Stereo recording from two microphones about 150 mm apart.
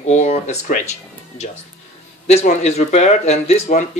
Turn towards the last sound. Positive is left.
turn(degrees=50)  # may be behind; listen again after turning